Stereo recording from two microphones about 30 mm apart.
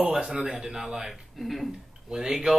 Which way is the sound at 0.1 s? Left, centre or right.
Centre.